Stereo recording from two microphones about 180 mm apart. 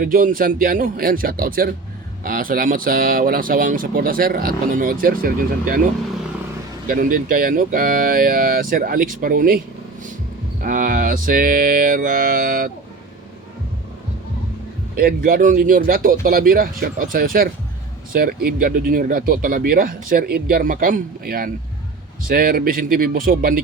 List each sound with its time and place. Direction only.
0.0 s speech: 50° right (ahead or behind)
10.6 s speech: 50° right (ahead or behind)
14.9 s speech: 50° right (ahead or behind)